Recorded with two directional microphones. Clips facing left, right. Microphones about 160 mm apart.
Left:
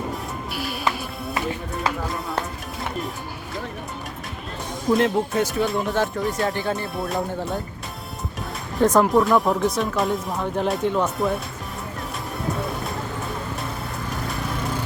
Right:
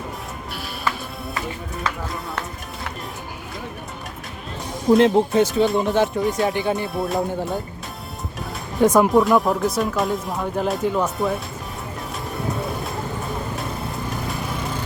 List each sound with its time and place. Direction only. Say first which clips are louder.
4.9 s speech: right 5 dB; 25° right (ahead or behind)
6.8 s speech: right 3 dB; centre (ahead or behind)
8.8 s speech: right 2 dB; 10° right (ahead or behind)
9.0 s speech: right 2 dB; centre (ahead or behind)